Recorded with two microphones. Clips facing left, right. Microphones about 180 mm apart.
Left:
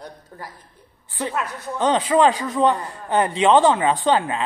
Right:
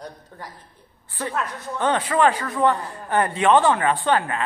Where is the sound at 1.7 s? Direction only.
20° left (ahead or behind).